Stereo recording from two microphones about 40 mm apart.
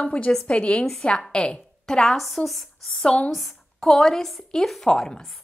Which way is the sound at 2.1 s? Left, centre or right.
Centre.